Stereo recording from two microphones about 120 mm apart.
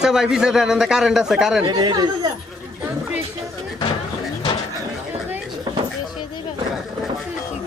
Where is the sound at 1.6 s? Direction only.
35° right (ahead or behind).